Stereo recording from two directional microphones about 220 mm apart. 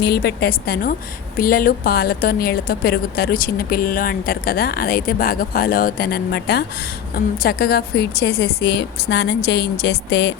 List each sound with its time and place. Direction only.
0.0 s a woman's voice: 45° left (ahead or behind)